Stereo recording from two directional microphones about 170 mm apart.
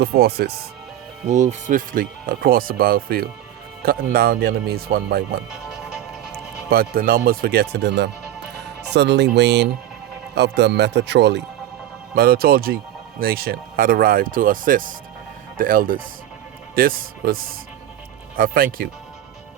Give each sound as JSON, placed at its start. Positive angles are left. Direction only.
{"t": 0.0, "sound": "speech", "side_deg": -70}
{"t": 1.3, "sound": "speech", "side_deg": -45}
{"t": 5.5, "sound": "music", "side_deg": -5}
{"t": 6.7, "sound": "speech", "side_deg": -60}
{"t": 12.1, "sound": "speech", "side_deg": -65}